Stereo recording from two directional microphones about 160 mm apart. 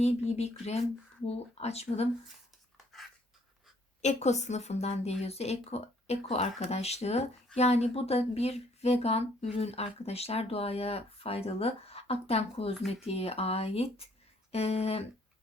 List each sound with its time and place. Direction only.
0.0 s speech: 40° left (ahead or behind)
4.0 s a woman's voice: 45° left (ahead or behind)